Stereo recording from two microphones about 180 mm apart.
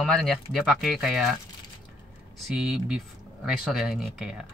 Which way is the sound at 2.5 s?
5° right (ahead or behind).